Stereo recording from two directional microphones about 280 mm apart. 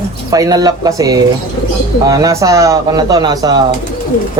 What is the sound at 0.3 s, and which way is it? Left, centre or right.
Speech, centre.